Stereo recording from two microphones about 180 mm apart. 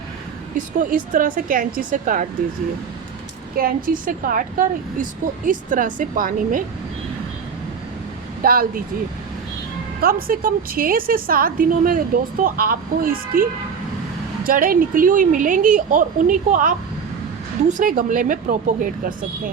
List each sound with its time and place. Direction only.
0.5 s a woman's voice: 50° right (ahead or behind)
3.6 s a woman's voice: 50° right (ahead or behind)
8.4 s a woman's voice: 55° right (ahead or behind)
10.0 s a woman's voice: 55° right (ahead or behind)
14.4 s a woman's voice: 50° right (ahead or behind)